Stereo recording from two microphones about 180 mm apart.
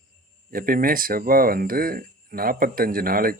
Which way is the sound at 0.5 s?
55° right (ahead or behind).